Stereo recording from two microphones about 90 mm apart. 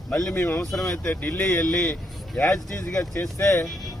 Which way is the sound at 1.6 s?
10° left (ahead or behind).